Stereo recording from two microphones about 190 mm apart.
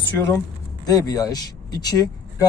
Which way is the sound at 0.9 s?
20° left (ahead or behind).